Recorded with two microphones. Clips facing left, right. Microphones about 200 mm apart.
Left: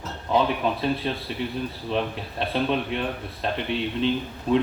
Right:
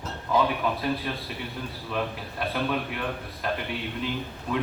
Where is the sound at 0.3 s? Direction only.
25° left (ahead or behind).